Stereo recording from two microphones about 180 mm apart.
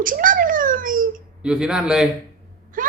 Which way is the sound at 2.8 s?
50° right (ahead or behind).